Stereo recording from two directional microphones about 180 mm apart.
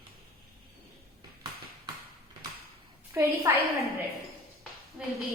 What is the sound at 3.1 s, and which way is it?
Speech, 15° right (ahead or behind).